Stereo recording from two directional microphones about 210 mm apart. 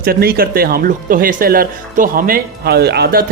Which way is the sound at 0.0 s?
45° right (ahead or behind).